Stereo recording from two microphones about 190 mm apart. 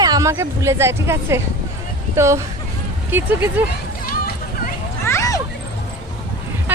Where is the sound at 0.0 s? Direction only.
20° right (ahead or behind).